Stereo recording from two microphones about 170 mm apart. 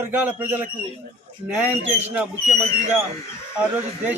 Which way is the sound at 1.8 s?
40° right (ahead or behind).